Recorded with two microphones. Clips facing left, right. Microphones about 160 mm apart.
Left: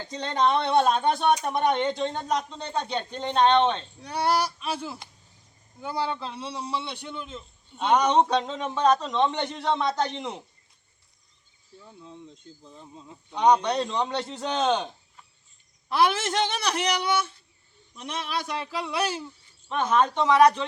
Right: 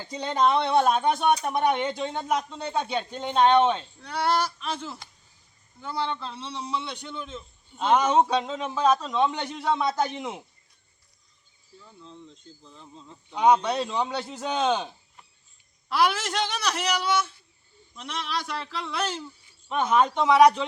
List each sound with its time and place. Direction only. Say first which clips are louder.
0.0 s a man's voice: right 1 dB; 10° right (ahead or behind)
4.0 s a man's voice: left 1 dB; 15° left (ahead or behind); by 10.4 s 5° right (ahead or behind)
11.8 s speech: left 2 dB; 15° left (ahead or behind)
13.3 s a man's voice: even; 5° right (ahead or behind)
15.9 s a woman's voice: left 1 dB; 20° left (ahead or behind)
17.9 s speech: left 1 dB; 15° left (ahead or behind)
19.6 s speech: right 1 dB; 10° right (ahead or behind)